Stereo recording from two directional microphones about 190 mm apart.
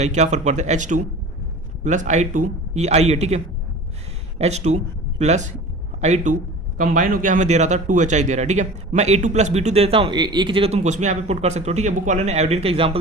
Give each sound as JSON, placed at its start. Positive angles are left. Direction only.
{"t": 0.0, "sound": "a man's voice", "side_deg": -35}